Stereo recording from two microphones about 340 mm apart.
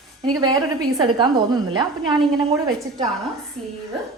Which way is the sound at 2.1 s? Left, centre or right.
Centre.